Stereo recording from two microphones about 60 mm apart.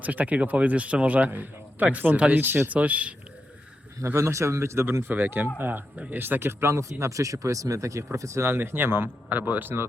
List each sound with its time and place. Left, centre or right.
0.0 s speech: right
4.0 s speech: right
7.0 s speech: right
8.4 s speech: right